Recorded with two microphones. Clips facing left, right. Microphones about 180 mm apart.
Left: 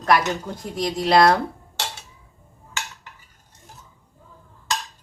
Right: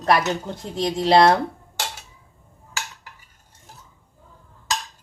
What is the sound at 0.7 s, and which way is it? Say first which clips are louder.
Speech: right 1 dB; 25° right (ahead or behind).